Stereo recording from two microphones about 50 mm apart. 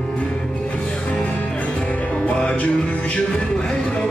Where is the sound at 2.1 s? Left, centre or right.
Left.